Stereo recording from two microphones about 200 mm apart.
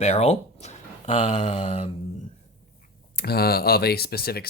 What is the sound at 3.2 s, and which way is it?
Speech, 50° left (ahead or behind).